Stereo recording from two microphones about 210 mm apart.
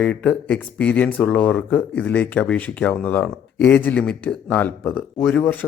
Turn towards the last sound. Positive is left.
turn(degrees=5)  # may be behind; listen again after turning